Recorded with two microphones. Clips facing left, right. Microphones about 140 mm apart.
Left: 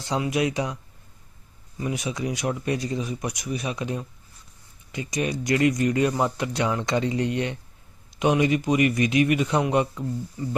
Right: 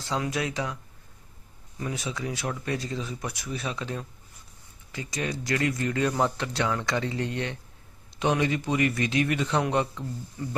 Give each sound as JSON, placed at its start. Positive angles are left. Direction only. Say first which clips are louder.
{"t": 0.0, "sound": "speech", "louder": "left 5 dB", "side_deg": 20}
{"t": 1.8, "sound": "speech", "louder": "left 4 dB", "side_deg": 15}